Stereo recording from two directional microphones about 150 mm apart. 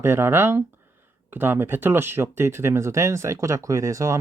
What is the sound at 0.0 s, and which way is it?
Speech, 15° right (ahead or behind).